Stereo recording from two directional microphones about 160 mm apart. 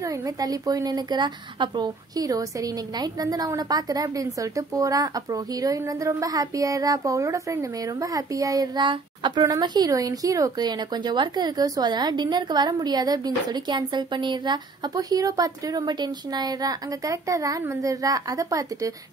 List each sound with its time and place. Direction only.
0.0 s a child's voice: 25° right (ahead or behind)